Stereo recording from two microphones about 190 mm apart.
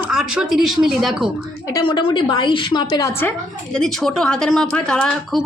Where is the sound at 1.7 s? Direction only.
25° left (ahead or behind).